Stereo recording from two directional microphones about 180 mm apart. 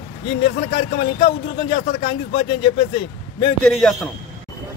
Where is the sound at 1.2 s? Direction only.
30° left (ahead or behind).